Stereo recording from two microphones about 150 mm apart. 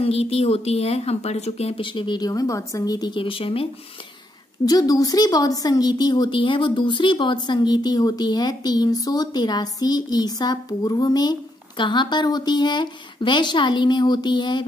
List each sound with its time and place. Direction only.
0.0 s speech: 40° left (ahead or behind)
4.6 s a woman's voice: 25° left (ahead or behind)